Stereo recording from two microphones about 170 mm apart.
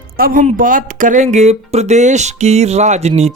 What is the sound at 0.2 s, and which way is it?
Speech, 55° right (ahead or behind).